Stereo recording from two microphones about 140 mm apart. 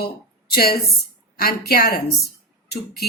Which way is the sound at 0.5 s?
90° left.